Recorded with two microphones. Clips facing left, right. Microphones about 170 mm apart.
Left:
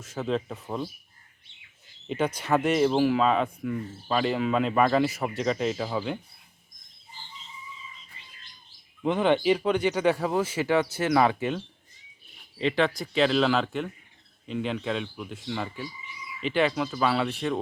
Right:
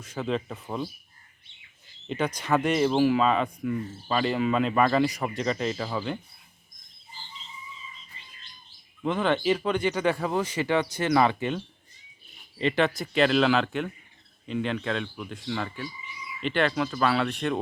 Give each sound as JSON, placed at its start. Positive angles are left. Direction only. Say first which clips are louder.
{"t": 0.0, "sound": "speech", "louder": "left 1 dB", "side_deg": 5}
{"t": 2.0, "sound": "speech", "louder": "left 1 dB", "side_deg": 5}
{"t": 9.0, "sound": "speech", "louder": "left 2 dB", "side_deg": 15}